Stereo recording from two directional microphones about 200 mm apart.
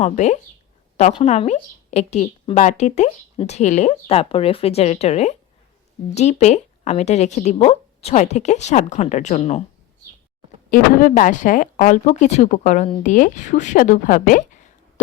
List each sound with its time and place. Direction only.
0.0 s speech: 35° left (ahead or behind)
10.7 s speech: 45° left (ahead or behind)